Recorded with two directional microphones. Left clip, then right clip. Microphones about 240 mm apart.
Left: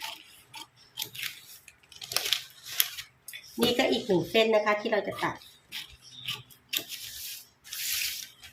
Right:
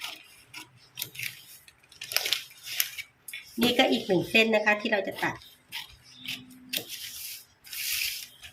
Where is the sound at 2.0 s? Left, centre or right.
Centre.